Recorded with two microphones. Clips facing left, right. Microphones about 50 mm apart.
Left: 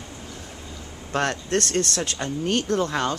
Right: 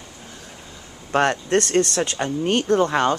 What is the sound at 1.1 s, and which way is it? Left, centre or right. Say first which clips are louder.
Speech: right 5 dB; centre.